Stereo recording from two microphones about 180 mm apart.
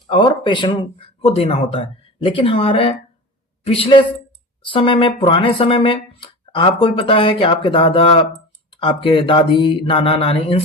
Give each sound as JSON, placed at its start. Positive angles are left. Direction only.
{"t": 0.1, "sound": "a woman's voice", "side_deg": 25}